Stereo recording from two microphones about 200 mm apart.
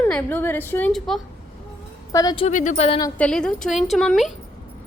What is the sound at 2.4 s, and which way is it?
Speech, 35° left (ahead or behind).